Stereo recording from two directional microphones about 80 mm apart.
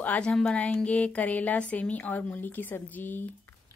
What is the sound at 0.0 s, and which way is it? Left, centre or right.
Speech, centre.